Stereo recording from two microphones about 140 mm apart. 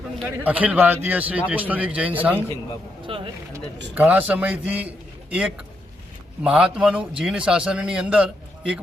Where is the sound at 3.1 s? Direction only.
40° right (ahead or behind).